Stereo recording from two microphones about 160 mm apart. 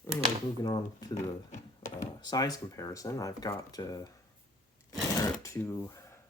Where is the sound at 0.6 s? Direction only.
25° left (ahead or behind).